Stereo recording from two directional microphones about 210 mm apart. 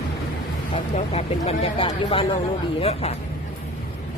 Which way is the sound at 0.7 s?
30° left (ahead or behind).